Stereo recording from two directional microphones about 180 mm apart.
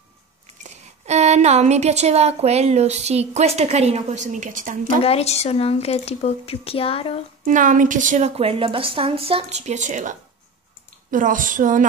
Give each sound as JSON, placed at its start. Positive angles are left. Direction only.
{"t": 0.7, "sound": "a woman's voice", "side_deg": -40}
{"t": 5.0, "sound": "speech", "side_deg": 35}
{"t": 7.4, "sound": "a woman's voice", "side_deg": -45}